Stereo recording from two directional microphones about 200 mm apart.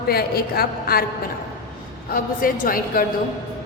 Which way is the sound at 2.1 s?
45° left (ahead or behind).